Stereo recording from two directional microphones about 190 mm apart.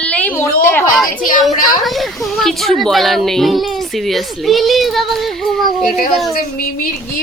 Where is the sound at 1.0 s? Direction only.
45° left (ahead or behind).